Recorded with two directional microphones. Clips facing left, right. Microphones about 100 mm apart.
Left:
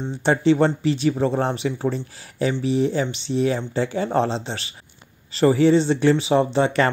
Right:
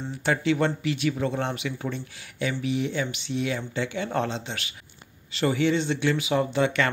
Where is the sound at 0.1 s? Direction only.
30° left (ahead or behind).